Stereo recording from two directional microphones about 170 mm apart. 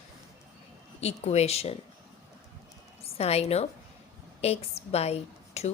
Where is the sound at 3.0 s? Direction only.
35° left (ahead or behind).